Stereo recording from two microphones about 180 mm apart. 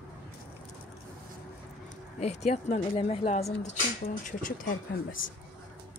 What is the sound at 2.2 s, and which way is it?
Speech, 35° left (ahead or behind).